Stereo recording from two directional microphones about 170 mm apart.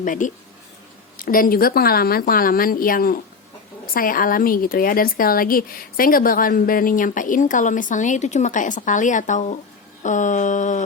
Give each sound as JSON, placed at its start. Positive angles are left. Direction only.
{"t": 0.0, "sound": "a woman's voice", "side_deg": 50}